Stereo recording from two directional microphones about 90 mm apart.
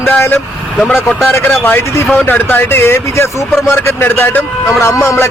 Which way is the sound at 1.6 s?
25° left (ahead or behind).